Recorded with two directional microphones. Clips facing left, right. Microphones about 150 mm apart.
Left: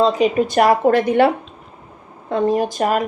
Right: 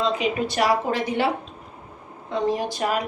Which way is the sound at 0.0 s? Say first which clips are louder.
Left 8 dB; 45° left (ahead or behind).